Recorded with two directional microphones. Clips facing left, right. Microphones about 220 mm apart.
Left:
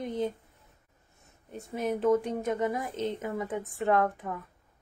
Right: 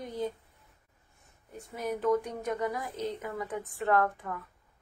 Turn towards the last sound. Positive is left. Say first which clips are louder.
# left 1 dB
turn(degrees=20)  # may be behind; listen again after turning